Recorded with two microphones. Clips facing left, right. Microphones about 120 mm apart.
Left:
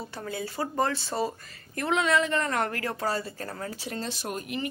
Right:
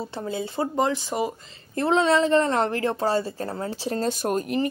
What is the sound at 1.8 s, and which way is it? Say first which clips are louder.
Speech: right 5 dB; 30° right (ahead or behind).